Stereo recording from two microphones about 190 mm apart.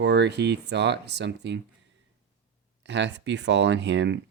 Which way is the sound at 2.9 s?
65° right (ahead or behind).